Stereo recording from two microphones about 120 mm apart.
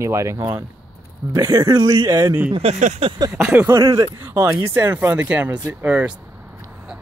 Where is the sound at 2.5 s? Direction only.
75° right (ahead or behind).